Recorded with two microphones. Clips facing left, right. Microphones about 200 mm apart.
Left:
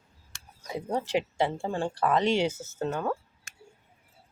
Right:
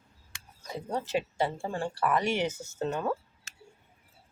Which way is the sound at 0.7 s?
15° left (ahead or behind).